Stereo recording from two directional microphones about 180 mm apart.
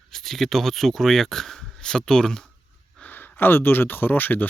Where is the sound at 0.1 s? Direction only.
Centre (ahead or behind).